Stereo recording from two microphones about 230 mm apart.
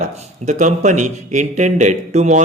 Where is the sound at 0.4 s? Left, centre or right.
Right.